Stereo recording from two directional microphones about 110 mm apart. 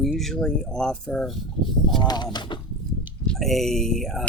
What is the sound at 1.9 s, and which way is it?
Speech, 40° left (ahead or behind).